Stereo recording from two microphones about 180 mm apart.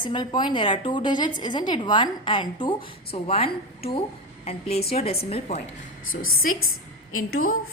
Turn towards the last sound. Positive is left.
turn(degrees=50)  # may be behind; listen again after turning